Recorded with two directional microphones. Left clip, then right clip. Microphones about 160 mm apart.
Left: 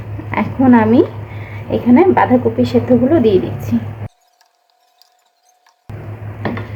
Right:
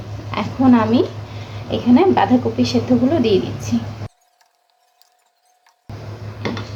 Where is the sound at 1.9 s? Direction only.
5° left (ahead or behind).